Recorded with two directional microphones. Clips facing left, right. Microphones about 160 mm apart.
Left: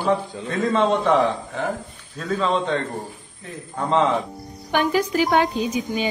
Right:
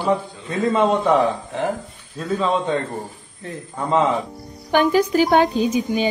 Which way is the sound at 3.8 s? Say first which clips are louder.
Right 1 dB; 10° right (ahead or behind).